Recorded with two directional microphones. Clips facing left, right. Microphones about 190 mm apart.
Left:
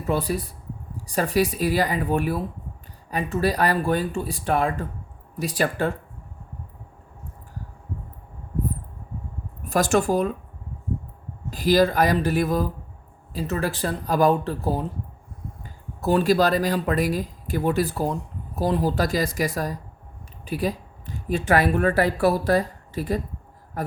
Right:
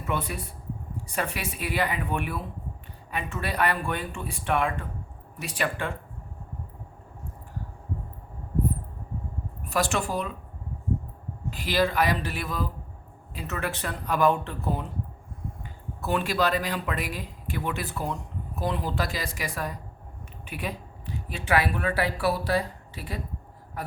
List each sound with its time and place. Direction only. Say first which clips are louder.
0.0 s speech: left 6 dB; 35° left (ahead or behind)
9.6 s speech: left 7 dB; 45° left (ahead or behind)
11.5 s speech: left 6 dB; 40° left (ahead or behind)